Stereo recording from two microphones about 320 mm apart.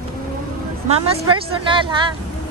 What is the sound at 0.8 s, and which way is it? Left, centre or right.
A woman's voice, centre.